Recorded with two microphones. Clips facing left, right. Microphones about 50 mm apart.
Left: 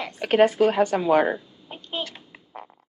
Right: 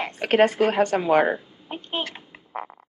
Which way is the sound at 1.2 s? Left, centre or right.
Right.